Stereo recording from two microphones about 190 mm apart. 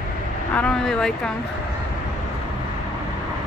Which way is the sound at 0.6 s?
5° left (ahead or behind).